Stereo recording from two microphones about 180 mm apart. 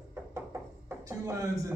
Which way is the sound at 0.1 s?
10° right (ahead or behind).